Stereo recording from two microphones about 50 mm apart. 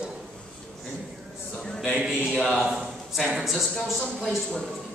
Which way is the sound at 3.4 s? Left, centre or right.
Centre.